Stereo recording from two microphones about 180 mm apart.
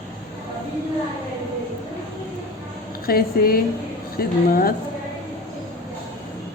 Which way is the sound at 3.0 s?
55° left (ahead or behind).